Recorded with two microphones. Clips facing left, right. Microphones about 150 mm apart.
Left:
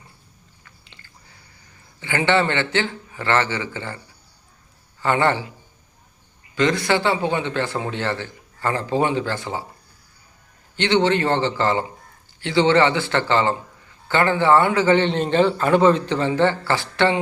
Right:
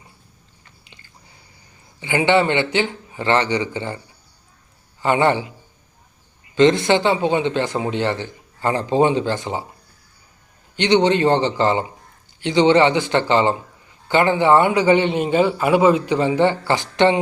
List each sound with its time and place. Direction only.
2.0 s a man's voice: 15° right (ahead or behind)
5.0 s a man's voice: 15° right (ahead or behind)
6.6 s speech: 25° right (ahead or behind)
10.8 s a man's voice: 15° right (ahead or behind)